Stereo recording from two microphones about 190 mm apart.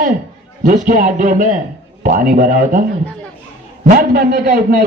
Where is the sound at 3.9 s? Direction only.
50° right (ahead or behind).